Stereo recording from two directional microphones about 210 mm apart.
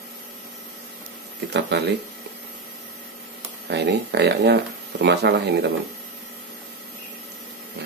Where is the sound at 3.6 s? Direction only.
55° right (ahead or behind).